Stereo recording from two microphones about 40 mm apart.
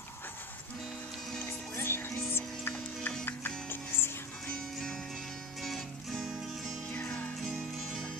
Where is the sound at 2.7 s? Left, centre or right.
Left.